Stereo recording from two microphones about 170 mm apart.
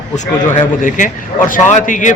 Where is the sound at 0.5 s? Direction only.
50° left (ahead or behind).